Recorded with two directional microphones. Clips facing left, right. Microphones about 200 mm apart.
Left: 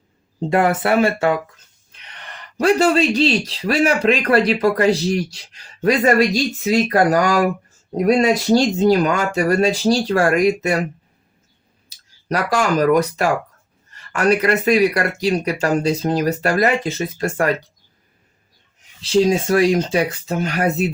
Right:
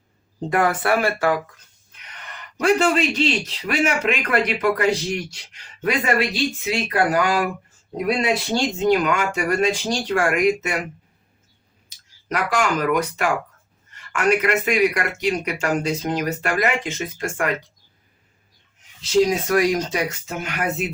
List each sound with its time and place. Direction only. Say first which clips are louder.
0.5 s speech: left 4 dB; 25° left (ahead or behind)
11.9 s speech: left 5 dB; 35° left (ahead or behind)
19.0 s speech: left 2 dB; 30° left (ahead or behind)